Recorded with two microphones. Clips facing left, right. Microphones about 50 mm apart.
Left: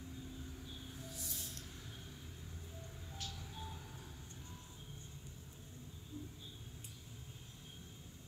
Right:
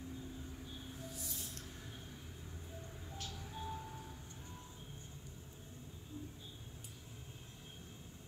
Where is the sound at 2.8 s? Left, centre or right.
Right.